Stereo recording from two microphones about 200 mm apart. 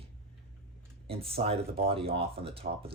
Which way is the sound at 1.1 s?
30° right (ahead or behind).